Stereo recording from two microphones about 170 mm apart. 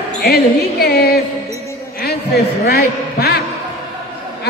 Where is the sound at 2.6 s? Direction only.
70° left (ahead or behind).